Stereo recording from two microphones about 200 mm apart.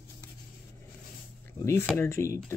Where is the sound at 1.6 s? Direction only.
15° left (ahead or behind).